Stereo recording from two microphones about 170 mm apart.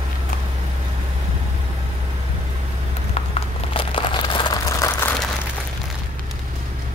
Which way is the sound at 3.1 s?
35° left (ahead or behind).